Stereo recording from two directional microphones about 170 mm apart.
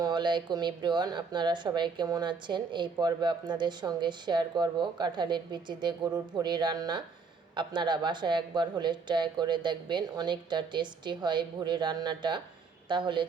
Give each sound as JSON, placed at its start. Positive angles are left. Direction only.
{"t": 0.0, "sound": "speech", "side_deg": -25}